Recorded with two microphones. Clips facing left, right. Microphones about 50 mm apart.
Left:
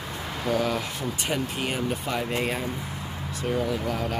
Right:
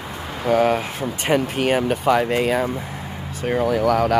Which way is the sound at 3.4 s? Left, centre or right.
Right.